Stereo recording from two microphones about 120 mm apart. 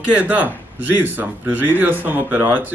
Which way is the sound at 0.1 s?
15° right (ahead or behind).